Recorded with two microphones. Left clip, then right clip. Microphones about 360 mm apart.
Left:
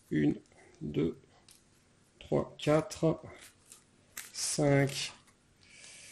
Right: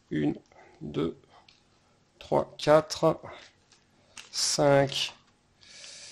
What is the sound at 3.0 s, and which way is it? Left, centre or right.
Speech, right.